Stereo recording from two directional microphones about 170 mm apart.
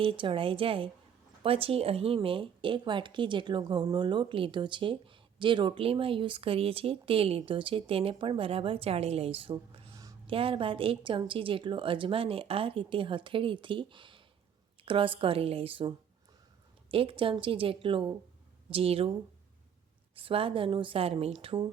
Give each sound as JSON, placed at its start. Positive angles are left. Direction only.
{"t": 0.0, "sound": "a woman's voice", "side_deg": -30}
{"t": 16.9, "sound": "a woman's voice", "side_deg": -30}
{"t": 20.1, "sound": "a woman's voice", "side_deg": -35}